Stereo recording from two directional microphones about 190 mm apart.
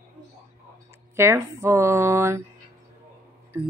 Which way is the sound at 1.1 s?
15° right (ahead or behind).